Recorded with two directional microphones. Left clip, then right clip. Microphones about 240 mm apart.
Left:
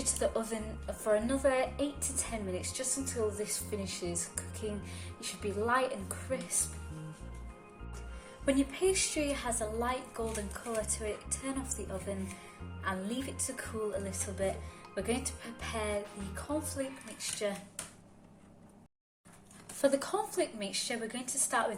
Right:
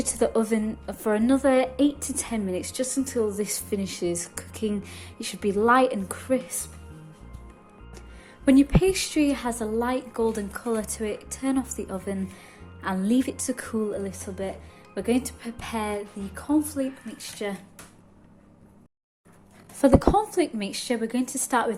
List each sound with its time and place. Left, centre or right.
0.0 s a woman's voice: right
8.4 s a woman's voice: right
19.8 s a woman's voice: right